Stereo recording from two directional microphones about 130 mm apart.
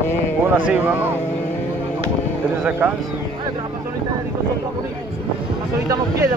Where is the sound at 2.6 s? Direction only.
15° right (ahead or behind).